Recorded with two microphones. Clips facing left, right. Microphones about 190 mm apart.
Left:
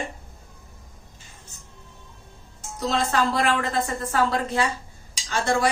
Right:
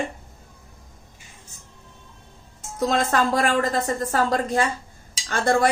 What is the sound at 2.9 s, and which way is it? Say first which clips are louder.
A woman's voice: right 1 dB; 50° right (ahead or behind).